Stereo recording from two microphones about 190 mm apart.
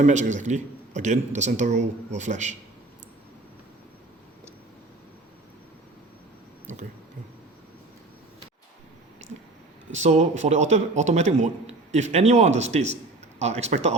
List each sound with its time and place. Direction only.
0.0 s a man's voice: 40° right (ahead or behind)
9.9 s a man's voice: 40° right (ahead or behind)